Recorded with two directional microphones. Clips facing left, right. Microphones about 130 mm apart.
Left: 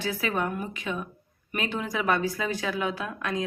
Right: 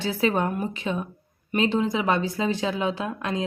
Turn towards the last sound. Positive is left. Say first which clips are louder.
# right 3 dB
turn(degrees=-25)  # may be behind; listen again after turning